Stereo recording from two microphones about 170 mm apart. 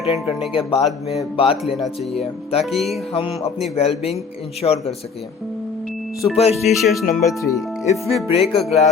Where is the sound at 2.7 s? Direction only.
Centre (ahead or behind).